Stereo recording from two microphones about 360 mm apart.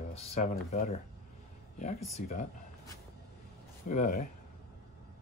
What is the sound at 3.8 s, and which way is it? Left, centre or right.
Speech, left.